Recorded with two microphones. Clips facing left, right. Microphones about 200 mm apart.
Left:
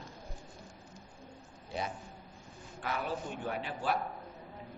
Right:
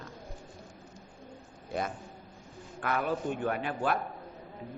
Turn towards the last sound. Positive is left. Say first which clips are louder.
# right 4 dB
turn(degrees=-55)  # may be behind; listen again after turning